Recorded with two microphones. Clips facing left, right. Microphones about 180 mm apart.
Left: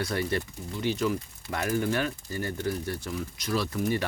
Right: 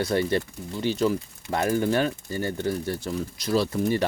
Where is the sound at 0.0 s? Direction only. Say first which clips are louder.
Right 5 dB; 25° right (ahead or behind).